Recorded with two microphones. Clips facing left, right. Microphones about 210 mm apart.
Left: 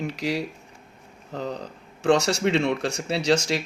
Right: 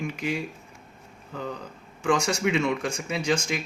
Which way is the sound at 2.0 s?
65° left (ahead or behind).